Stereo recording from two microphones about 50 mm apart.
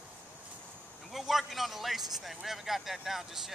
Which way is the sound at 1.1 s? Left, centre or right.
Centre.